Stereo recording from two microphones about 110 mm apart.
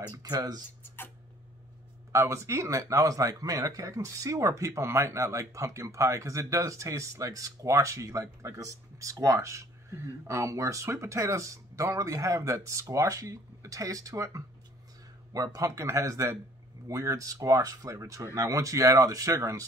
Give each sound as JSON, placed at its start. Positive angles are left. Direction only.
{"t": 0.1, "sound": "speech", "side_deg": -35}
{"t": 0.8, "sound": "rodents", "side_deg": 20}
{"t": 2.1, "sound": "speech", "side_deg": -25}